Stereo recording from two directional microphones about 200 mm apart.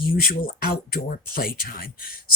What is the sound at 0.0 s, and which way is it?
Speech, 45° left (ahead or behind).